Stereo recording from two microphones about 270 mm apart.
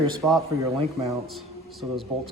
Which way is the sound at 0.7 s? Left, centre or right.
Right.